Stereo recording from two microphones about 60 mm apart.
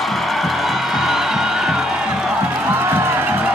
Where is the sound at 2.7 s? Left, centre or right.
Right.